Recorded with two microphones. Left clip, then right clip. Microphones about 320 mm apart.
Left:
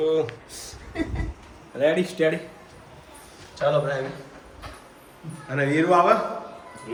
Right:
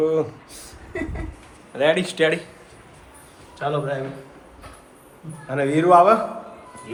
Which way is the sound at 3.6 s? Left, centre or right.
Centre.